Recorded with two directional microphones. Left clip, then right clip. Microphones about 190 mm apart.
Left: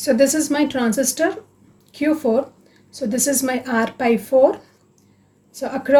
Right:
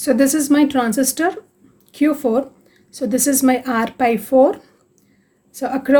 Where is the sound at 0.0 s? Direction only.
45° right (ahead or behind).